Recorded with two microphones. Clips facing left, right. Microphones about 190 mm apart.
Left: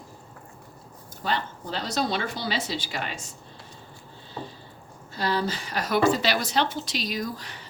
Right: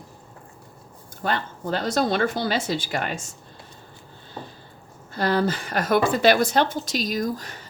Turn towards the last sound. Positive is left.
turn(degrees=-45)  # may be behind; listen again after turning